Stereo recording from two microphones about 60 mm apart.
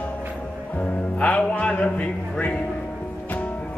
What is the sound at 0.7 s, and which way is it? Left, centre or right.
Speech, left.